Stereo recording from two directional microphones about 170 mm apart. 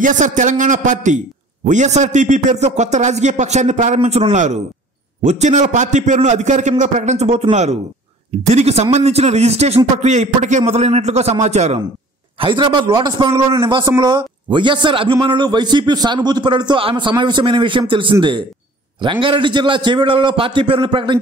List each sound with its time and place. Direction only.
0.0 s a man's voice: 45° right (ahead or behind)
12.4 s a man's voice: 30° right (ahead or behind)